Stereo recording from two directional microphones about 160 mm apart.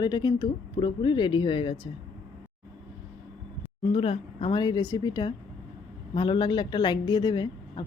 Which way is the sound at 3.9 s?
35° left (ahead or behind).